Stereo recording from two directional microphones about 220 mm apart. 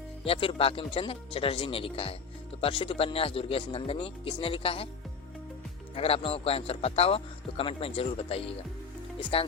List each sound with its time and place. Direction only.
0.3 s speech: 25° left (ahead or behind)
5.9 s speech: 25° left (ahead or behind)